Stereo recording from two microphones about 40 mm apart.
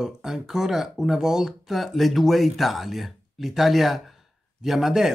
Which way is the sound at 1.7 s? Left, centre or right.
Centre.